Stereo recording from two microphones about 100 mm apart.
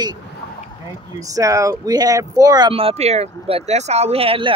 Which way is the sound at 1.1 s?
35° right (ahead or behind).